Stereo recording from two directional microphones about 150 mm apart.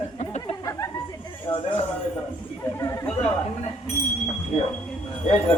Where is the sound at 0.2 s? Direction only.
50° left (ahead or behind).